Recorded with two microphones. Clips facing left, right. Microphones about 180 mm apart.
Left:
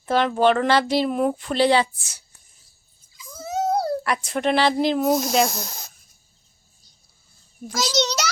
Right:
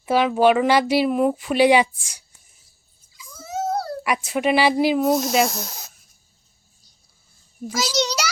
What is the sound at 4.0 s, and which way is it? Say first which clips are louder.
Speech: right 2 dB; 10° right (ahead or behind).